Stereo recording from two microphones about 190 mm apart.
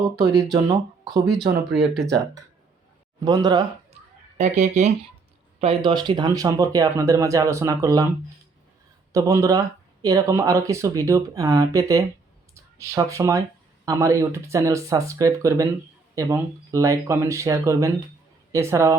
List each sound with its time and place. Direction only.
0.4 s speech: 20° right (ahead or behind)
1.3 s speech: centre (ahead or behind)
3.2 s speech: 20° right (ahead or behind)
4.4 s speech: 35° right (ahead or behind); by 8.1 s 15° right (ahead or behind)
9.1 s speech: 15° right (ahead or behind)